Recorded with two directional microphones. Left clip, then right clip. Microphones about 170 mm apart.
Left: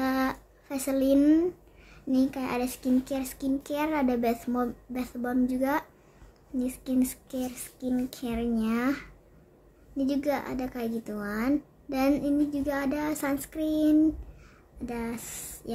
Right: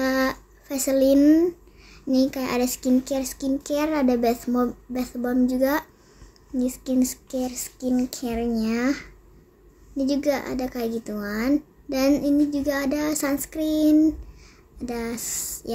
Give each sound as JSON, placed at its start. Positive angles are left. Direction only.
{"t": 0.0, "sound": "a child's voice", "side_deg": -15}